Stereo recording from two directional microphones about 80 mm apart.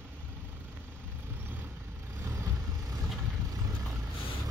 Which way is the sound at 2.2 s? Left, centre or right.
Right.